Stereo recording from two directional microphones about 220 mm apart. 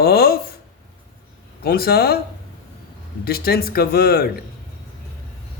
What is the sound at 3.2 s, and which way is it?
Speech, 45° left (ahead or behind).